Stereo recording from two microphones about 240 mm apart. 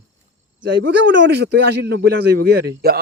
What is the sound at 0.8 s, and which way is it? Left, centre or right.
Speech, right.